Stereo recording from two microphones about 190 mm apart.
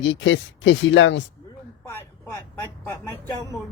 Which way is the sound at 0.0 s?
75° left (ahead or behind).